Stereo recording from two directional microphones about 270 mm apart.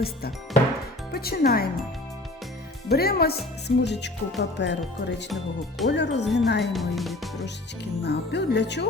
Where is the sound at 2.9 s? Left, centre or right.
Left.